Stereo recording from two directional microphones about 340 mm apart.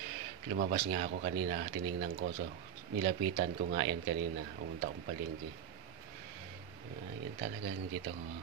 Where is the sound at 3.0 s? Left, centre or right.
Right.